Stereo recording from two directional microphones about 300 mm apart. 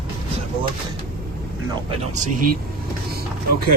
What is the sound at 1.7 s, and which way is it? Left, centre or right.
Speech, right.